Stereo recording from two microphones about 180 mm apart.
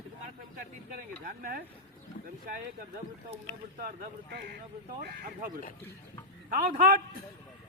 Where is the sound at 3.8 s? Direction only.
55° right (ahead or behind).